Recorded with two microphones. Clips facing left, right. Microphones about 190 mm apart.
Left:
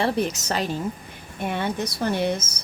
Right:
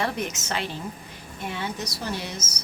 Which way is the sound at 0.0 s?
35° left (ahead or behind).